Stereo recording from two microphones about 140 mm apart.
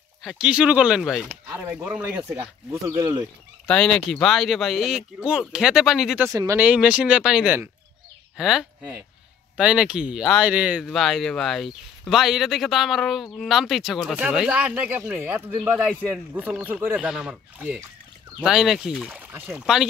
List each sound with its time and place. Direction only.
0.2 s speech: 5° right (ahead or behind)
1.3 s speech: 15° right (ahead or behind)
3.0 s speech: 25° right (ahead or behind)
3.6 s speech: 5° left (ahead or behind)
6.2 s speech: 20° right (ahead or behind)
6.6 s speech: 10° right (ahead or behind)
19.2 s speech: 15° right (ahead or behind)
19.6 s speech: 5° right (ahead or behind)